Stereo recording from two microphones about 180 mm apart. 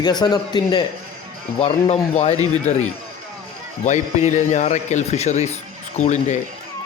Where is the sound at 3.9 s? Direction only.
40° left (ahead or behind).